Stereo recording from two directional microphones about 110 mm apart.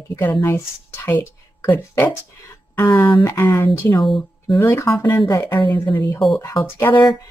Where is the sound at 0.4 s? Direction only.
20° left (ahead or behind).